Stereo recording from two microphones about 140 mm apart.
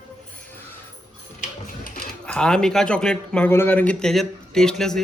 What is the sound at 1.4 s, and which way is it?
Music, 90° left.